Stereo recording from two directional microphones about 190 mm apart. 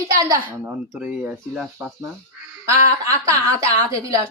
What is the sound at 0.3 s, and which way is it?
Speech, 10° right (ahead or behind).